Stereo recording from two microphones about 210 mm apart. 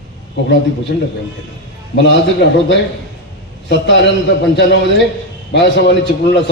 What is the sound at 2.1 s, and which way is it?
A man's voice, 55° left (ahead or behind).